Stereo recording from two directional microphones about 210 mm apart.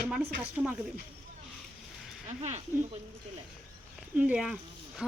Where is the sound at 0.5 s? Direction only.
5° right (ahead or behind).